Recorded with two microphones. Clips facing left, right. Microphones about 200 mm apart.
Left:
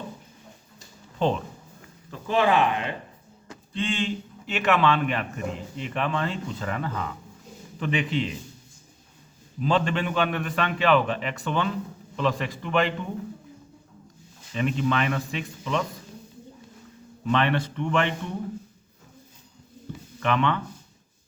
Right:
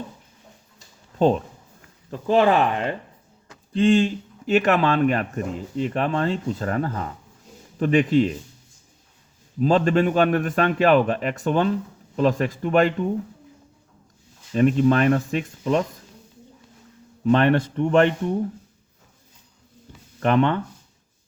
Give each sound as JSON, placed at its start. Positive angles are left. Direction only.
{"t": 2.0, "sound": "a man's voice", "side_deg": -40}
{"t": 9.6, "sound": "a man's voice", "side_deg": -45}
{"t": 14.5, "sound": "a man's voice", "side_deg": -45}
{"t": 17.3, "sound": "a man's voice", "side_deg": -45}
{"t": 20.1, "sound": "speech", "side_deg": -40}